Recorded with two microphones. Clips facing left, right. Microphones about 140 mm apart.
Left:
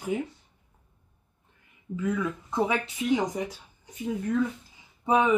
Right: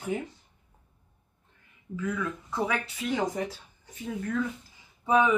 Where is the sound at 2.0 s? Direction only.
20° left (ahead or behind).